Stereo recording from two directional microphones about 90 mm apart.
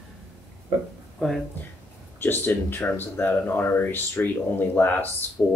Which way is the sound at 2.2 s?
20° left (ahead or behind).